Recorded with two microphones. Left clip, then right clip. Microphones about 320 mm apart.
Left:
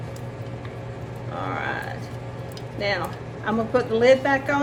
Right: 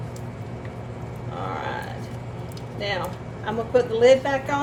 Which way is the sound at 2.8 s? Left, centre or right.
Centre.